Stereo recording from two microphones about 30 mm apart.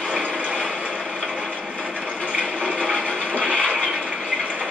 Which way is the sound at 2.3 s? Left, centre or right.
Right.